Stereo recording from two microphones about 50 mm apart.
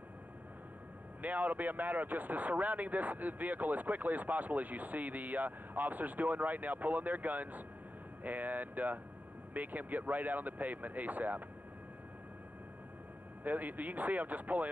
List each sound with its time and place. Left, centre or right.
1.2 s speech: right
13.4 s speech: right